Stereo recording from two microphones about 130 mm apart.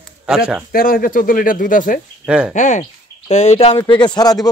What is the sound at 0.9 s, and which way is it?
Speech, 90° left.